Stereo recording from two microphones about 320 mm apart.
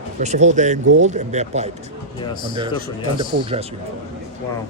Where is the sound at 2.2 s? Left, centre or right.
Centre.